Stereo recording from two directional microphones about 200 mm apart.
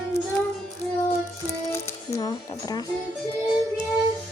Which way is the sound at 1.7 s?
15° left (ahead or behind).